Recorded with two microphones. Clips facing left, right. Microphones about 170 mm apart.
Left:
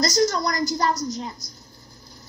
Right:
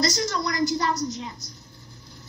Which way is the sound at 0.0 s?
40° left (ahead or behind).